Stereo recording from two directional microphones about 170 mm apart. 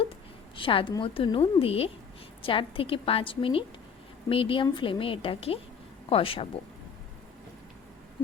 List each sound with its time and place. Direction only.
0.5 s a woman's voice: 30° left (ahead or behind)